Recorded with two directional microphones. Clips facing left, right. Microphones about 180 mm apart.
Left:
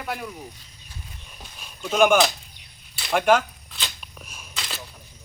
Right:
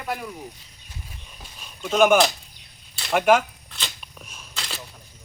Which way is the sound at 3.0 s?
5° right (ahead or behind).